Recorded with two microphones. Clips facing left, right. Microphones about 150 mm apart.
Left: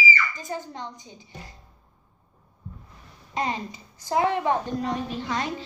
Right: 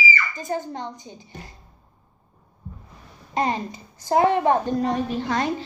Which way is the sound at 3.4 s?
45° right (ahead or behind).